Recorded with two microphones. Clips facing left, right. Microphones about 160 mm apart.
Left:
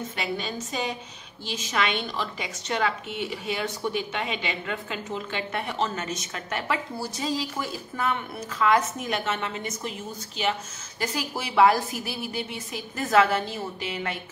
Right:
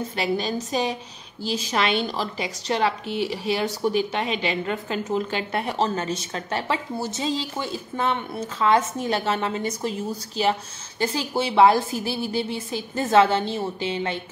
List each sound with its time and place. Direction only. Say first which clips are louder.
0.1 s a woman's voice: right 6 dB; 35° right (ahead or behind)